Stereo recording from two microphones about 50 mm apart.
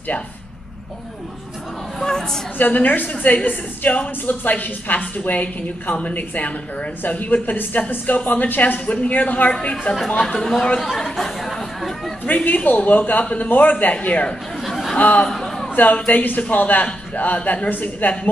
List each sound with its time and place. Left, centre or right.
2.0 s chatter: centre
2.6 s a woman's voice: left
9.5 s a woman's voice: left
9.9 s speech: centre
10.8 s chatter: centre
12.3 s a woman's voice: left
15.2 s a sound: centre
15.7 s a woman's voice: left
17.6 s a woman's voice: left